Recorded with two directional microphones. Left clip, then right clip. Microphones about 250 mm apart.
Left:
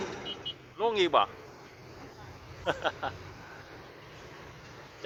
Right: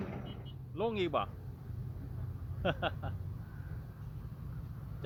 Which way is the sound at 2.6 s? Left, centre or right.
Centre.